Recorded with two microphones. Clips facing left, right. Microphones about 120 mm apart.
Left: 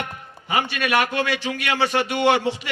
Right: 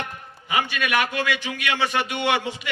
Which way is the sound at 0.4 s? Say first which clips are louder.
Left 1 dB; 35° left (ahead or behind).